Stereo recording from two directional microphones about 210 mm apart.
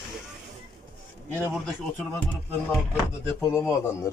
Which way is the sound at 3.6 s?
10° left (ahead or behind).